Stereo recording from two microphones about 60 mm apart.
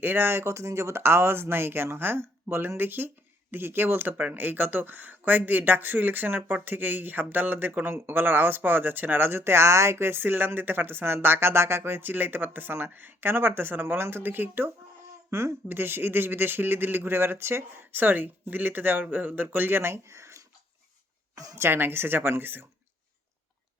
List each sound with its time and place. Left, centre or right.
0.0 s speech: right
0.4 s speech: right
15.3 s speech: right
15.7 s speech: right
17.9 s speech: right
21.5 s speech: right